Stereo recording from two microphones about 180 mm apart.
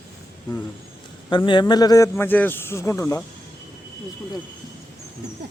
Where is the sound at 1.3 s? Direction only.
25° left (ahead or behind).